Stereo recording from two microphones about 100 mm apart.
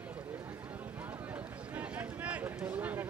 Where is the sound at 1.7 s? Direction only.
15° right (ahead or behind).